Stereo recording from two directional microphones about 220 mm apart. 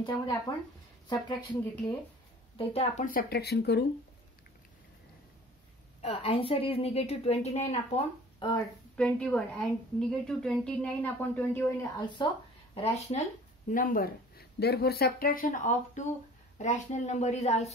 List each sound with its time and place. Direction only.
0.5 s a woman's voice: 20° left (ahead or behind)
1.6 s speech: 10° left (ahead or behind)
2.5 s a woman's voice: 25° left (ahead or behind)
3.1 s speech: 45° left (ahead or behind)
5.9 s a woman's voice: 25° left (ahead or behind)
8.9 s a woman's voice: 5° left (ahead or behind)
12.2 s a woman's voice: 20° left (ahead or behind)